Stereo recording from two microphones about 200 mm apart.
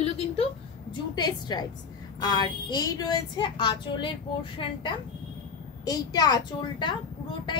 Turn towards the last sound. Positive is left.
turn(degrees=25)  # may be behind; listen again after turning